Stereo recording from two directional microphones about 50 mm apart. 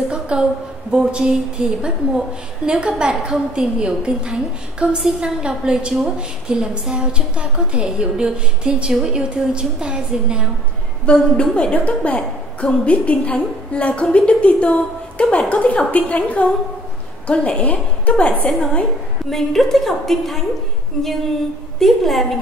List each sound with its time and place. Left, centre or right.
0.1 s a sound: centre
0.9 s a woman's voice: centre
11.1 s a woman's voice: left
19.3 s a woman's voice: centre
21.7 s a woman's voice: centre